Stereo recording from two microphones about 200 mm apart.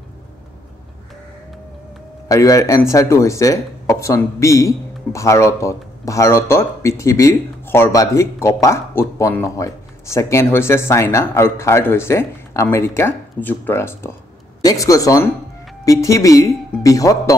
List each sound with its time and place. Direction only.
2.2 s speech: 15° left (ahead or behind)